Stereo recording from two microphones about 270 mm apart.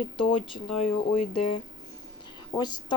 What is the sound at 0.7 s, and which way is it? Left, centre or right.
Speech, left.